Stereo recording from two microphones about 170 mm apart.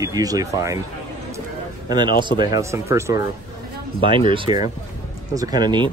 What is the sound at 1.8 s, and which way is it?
A man's voice, 25° right (ahead or behind).